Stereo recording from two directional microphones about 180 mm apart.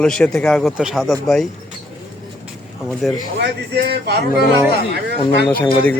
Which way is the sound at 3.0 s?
Centre (ahead or behind).